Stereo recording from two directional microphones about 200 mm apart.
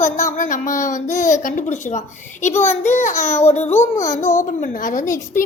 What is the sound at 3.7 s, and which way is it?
Speech, 10° left (ahead or behind).